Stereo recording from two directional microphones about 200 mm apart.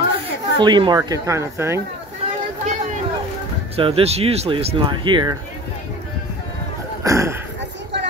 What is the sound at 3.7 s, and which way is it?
Speech, 30° right (ahead or behind).